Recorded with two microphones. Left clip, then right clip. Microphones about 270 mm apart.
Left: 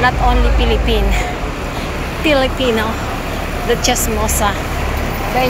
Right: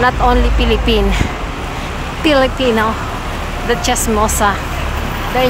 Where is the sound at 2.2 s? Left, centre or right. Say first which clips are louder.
Right 2 dB; centre.